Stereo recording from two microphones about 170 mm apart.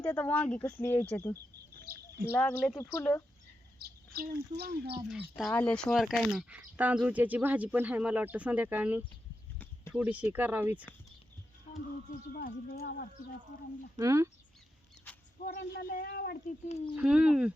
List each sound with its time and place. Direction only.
0.0 s speech: 10° left (ahead or behind)
1.7 s bird: 65° right (ahead or behind)
2.3 s speech: 10° left (ahead or behind)
3.8 s speech: 65° right (ahead or behind)
5.4 s speech: 5° left (ahead or behind); by 10.8 s 10° right (ahead or behind)
12.3 s speech: 60° left (ahead or behind)
14.0 s speech: 20° right (ahead or behind)
15.4 s speech: 70° left (ahead or behind)
16.5 s speech: 40° left (ahead or behind)
17.0 s speech: 5° right (ahead or behind)